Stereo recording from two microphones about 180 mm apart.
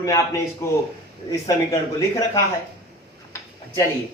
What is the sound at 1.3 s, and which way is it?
Speech, 20° left (ahead or behind).